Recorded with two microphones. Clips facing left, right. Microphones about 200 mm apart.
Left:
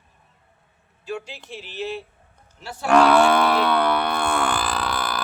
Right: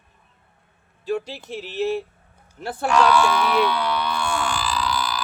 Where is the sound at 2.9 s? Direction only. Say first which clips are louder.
Left 3 dB; 55° left (ahead or behind).